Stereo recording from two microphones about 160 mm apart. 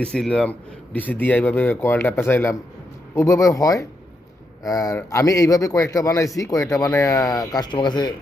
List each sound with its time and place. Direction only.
0.0 s a man's voice: 5° left (ahead or behind); by 8.1 s 30° left (ahead or behind)